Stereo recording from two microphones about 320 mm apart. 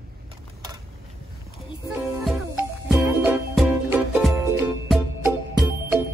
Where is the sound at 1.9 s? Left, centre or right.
Centre.